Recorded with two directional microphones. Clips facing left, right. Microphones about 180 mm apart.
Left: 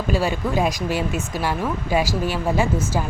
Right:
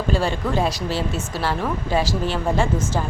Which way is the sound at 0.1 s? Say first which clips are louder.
Left 1 dB; 10° left (ahead or behind).